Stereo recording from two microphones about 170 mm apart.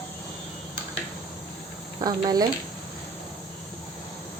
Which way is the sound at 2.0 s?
25° right (ahead or behind).